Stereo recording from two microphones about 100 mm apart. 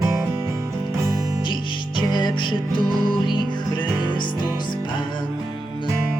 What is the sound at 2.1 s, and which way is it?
Music, 50° left (ahead or behind).